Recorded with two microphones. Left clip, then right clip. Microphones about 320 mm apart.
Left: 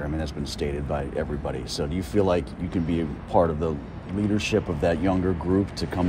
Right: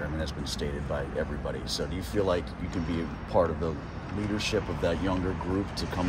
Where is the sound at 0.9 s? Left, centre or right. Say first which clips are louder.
Left 4 dB; left.